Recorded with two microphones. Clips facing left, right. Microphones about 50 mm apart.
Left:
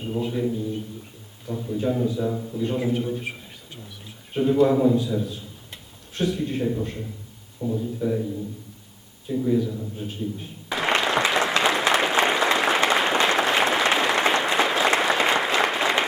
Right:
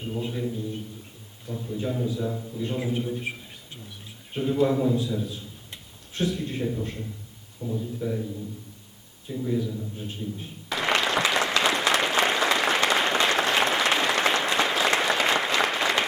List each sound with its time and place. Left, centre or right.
0.2 s a man's voice: centre
1.5 s a man's voice: centre
4.4 s a man's voice: centre
9.3 s a man's voice: centre
10.1 s applause: centre